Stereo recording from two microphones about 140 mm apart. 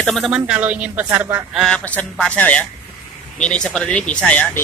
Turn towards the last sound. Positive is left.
turn(degrees=10)  # may be behind; listen again after turning